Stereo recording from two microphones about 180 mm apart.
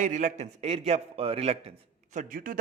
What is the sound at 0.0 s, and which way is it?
A man's voice, 40° right (ahead or behind).